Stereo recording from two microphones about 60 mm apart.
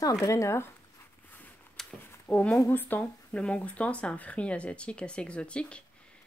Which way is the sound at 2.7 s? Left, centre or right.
Left.